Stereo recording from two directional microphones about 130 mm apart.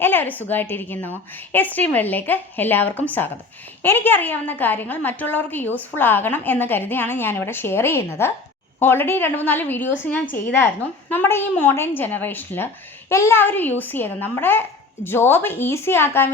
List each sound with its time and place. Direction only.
0.0 s a woman's voice: 15° left (ahead or behind)